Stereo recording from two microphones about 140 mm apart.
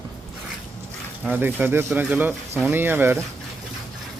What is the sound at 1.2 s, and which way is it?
Speech, 15° right (ahead or behind).